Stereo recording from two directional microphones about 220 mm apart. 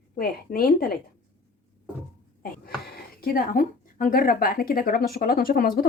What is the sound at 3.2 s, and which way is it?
Speech, 40° left (ahead or behind).